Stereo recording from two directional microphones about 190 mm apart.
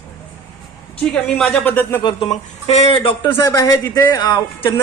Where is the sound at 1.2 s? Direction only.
5° left (ahead or behind).